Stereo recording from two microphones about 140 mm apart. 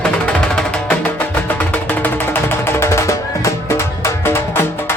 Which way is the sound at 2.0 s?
15° left (ahead or behind).